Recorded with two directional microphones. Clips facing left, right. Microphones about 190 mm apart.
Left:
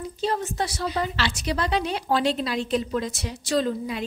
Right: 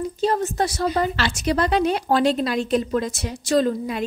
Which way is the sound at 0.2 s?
45° right (ahead or behind).